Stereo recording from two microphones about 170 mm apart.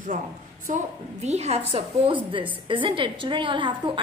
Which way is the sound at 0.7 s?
45° right (ahead or behind).